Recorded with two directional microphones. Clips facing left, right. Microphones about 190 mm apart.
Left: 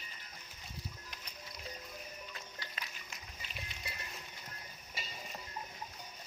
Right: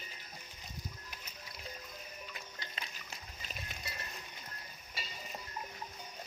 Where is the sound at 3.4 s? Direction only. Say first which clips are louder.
Right 1 dB; 40° right (ahead or behind).